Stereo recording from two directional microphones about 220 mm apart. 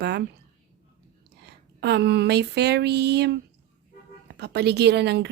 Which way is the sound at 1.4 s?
50° right (ahead or behind).